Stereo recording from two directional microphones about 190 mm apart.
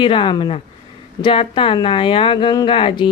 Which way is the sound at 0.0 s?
25° left (ahead or behind).